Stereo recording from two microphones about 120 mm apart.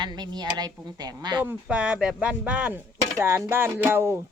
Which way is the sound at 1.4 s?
10° right (ahead or behind).